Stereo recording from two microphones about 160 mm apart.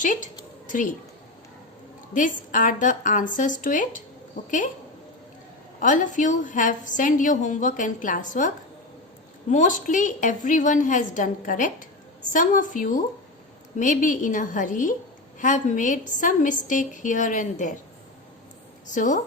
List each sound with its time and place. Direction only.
0.0 s a woman's voice: 55° left (ahead or behind)
2.1 s a woman's voice: 55° left (ahead or behind)
5.8 s a woman's voice: 55° left (ahead or behind)
18.9 s a woman's voice: 50° left (ahead or behind)